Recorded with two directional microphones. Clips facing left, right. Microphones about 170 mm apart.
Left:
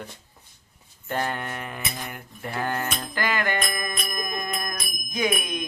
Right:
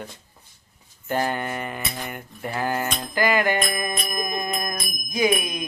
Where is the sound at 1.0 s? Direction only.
5° right (ahead or behind).